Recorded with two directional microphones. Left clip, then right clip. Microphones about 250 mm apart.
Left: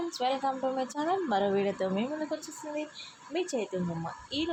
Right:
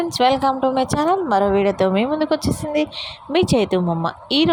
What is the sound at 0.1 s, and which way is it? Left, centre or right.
A woman's voice, right.